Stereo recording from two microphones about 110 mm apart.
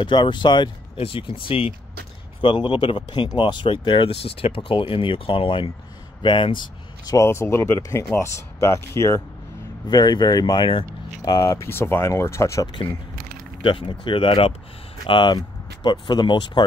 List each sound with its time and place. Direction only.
0.0 s speech: 45° left (ahead or behind)
7.2 s speech: 25° left (ahead or behind)
9.8 s speech: 40° left (ahead or behind)
11.3 s speech: 30° left (ahead or behind)
13.6 s speech: 50° left (ahead or behind)